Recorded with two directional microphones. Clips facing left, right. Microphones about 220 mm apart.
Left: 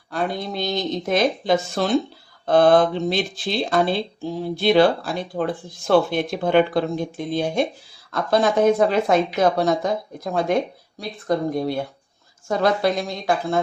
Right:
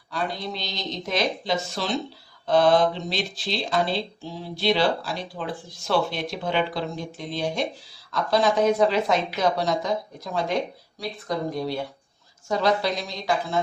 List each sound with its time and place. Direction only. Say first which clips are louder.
0.1 s speech: left 4 dB; 50° left (ahead or behind)